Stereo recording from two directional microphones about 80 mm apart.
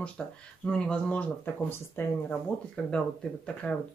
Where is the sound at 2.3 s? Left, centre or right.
Centre.